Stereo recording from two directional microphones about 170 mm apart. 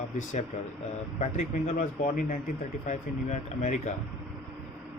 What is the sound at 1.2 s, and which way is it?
A man's voice, 40° left (ahead or behind).